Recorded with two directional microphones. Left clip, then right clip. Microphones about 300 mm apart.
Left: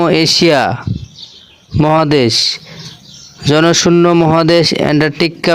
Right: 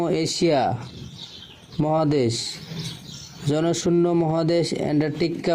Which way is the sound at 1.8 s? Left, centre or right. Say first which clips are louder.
Left 11 dB; left.